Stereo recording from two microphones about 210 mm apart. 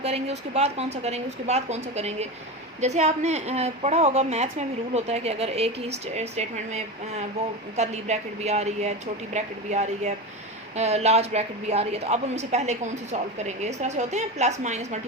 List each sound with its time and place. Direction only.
0.0 s a woman's voice: 30° right (ahead or behind)